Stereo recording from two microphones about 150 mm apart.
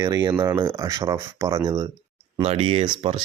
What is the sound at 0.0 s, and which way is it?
Speech, 25° right (ahead or behind).